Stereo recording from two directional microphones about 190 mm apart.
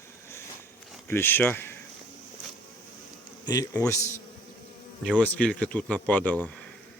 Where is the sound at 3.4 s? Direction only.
20° left (ahead or behind).